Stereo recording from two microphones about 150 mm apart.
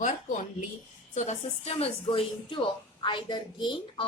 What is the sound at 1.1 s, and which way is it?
A woman's voice, 45° left (ahead or behind).